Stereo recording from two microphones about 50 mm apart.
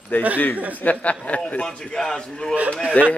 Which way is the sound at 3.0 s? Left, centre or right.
Left.